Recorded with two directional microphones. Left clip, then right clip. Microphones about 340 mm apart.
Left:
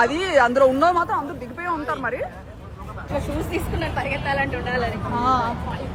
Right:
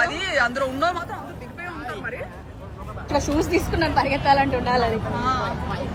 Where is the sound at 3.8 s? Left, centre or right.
Centre.